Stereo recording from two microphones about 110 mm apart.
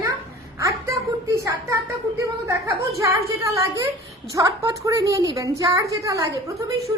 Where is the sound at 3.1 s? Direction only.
30° right (ahead or behind).